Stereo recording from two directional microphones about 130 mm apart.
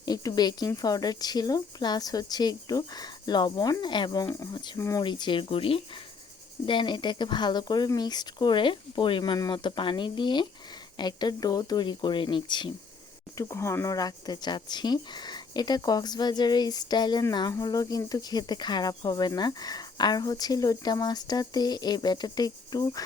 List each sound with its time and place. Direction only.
0.0 s speech: 30° left (ahead or behind)
4.8 s speech: 25° left (ahead or behind)
5.0 s speech: 35° left (ahead or behind)
13.3 s speech: 20° left (ahead or behind)